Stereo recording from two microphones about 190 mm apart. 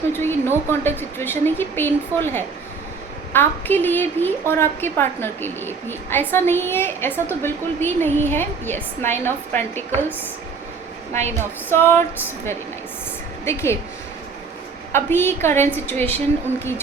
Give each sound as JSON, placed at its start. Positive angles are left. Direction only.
{"t": 0.1, "sound": "a woman's voice", "side_deg": 10}
{"t": 11.3, "sound": "a woman's voice", "side_deg": 10}
{"t": 14.9, "sound": "a woman's voice", "side_deg": 10}